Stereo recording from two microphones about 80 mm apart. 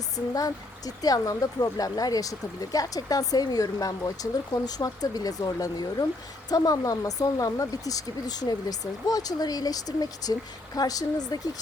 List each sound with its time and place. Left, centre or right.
0.3 s speech: left